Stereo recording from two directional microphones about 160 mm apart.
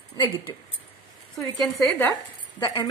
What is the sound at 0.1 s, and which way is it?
Speech, 30° left (ahead or behind).